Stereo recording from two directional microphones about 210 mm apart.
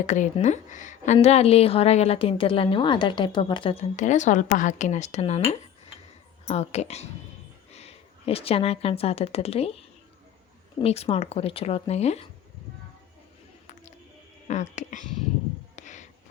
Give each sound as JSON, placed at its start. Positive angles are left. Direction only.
{"t": 0.0, "sound": "a woman's voice", "side_deg": 35}
{"t": 10.8, "sound": "speech", "side_deg": 30}
{"t": 14.4, "sound": "a woman's voice", "side_deg": 35}
{"t": 15.7, "sound": "a sound", "side_deg": 35}